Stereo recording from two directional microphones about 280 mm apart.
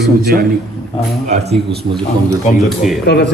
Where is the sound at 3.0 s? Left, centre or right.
Left.